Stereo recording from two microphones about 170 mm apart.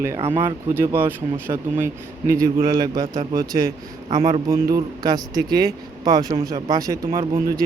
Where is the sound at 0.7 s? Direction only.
15° right (ahead or behind).